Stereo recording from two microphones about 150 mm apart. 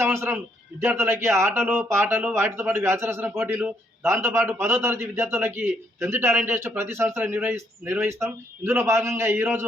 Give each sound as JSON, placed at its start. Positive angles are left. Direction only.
{"t": 0.0, "sound": "a man's voice", "side_deg": -15}